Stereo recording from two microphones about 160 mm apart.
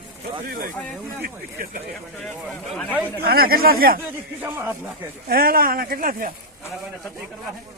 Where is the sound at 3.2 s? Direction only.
70° right (ahead or behind).